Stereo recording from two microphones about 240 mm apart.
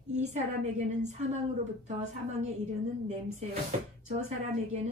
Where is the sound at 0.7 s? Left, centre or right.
Right.